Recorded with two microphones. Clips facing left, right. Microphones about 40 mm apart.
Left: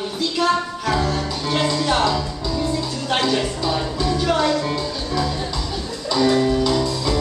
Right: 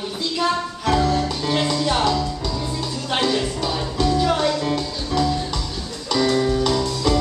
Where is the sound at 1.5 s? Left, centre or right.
Centre.